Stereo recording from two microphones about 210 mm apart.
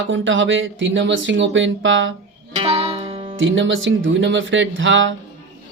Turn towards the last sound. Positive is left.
turn(degrees=-65)  # may be behind; listen again after turning